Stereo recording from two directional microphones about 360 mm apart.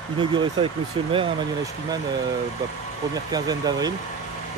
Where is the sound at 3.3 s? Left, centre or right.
Centre.